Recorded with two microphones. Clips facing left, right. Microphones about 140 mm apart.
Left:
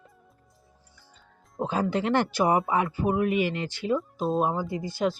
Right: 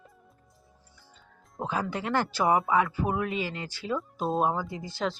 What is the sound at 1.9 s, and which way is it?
Speech, 20° left (ahead or behind).